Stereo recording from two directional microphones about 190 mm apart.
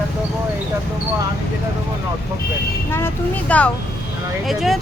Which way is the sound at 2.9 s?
10° left (ahead or behind).